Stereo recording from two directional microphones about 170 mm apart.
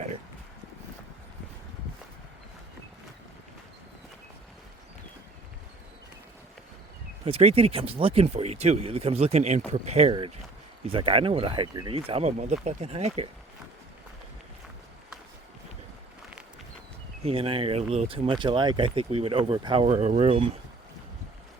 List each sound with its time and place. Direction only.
7.3 s speech: 35° right (ahead or behind)
17.2 s speech: 35° right (ahead or behind)